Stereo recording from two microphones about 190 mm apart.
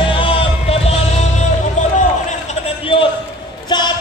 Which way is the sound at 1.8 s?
40° left (ahead or behind).